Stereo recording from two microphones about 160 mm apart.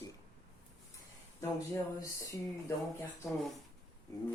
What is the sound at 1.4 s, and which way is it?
Speech, 20° left (ahead or behind).